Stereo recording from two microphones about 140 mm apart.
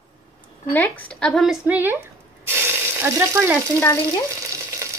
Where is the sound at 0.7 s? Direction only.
10° left (ahead or behind).